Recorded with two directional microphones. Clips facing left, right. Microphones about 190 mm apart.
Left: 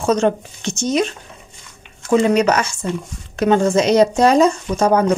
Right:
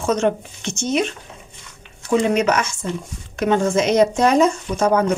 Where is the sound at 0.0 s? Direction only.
35° left (ahead or behind).